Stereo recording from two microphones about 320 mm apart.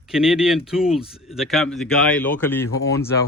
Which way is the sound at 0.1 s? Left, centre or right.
Centre.